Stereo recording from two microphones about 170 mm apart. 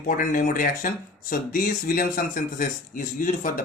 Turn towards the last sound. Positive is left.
turn(degrees=50)  # may be behind; listen again after turning